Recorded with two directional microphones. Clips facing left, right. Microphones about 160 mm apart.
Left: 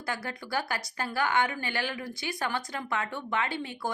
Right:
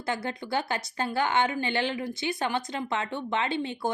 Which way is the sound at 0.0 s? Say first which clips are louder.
Right 4 dB; 25° right (ahead or behind).